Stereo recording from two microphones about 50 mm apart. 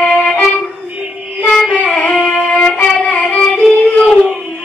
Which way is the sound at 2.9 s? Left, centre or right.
Centre.